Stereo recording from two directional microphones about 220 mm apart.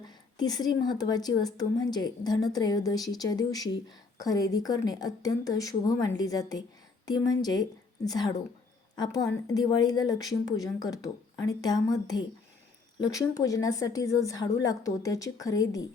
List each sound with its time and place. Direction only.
0.0 s speech: 20° left (ahead or behind)
9.0 s speech: 15° left (ahead or behind)